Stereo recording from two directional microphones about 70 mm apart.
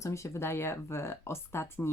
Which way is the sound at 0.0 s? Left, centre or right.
Left.